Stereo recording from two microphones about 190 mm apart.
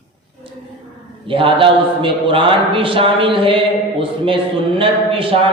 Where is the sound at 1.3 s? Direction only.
25° right (ahead or behind).